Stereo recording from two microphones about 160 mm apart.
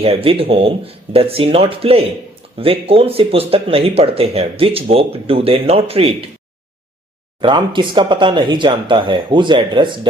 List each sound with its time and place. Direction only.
0.0 s speech: 35° right (ahead or behind)
7.4 s speech: 30° right (ahead or behind)